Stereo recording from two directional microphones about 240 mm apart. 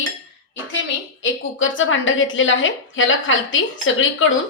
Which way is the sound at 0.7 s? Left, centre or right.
Left.